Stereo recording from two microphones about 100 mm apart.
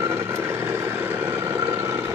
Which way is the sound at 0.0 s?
25° right (ahead or behind).